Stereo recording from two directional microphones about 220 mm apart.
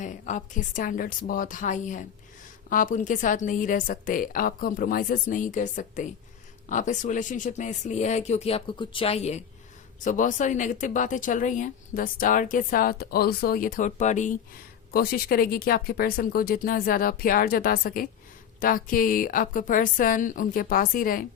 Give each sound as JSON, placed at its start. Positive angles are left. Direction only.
{"t": 0.0, "sound": "speech", "side_deg": 35}